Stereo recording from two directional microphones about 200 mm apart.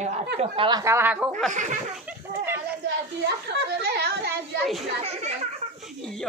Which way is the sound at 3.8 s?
50° right (ahead or behind).